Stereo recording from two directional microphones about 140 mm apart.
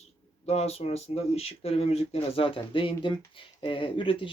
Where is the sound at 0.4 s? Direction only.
50° left (ahead or behind).